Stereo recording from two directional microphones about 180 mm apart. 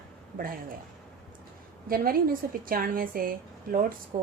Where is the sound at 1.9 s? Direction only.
55° right (ahead or behind).